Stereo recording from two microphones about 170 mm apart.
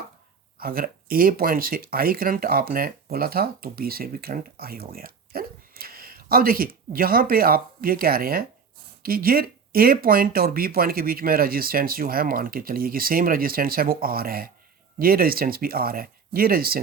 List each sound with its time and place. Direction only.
0.6 s speech: 60° right (ahead or behind)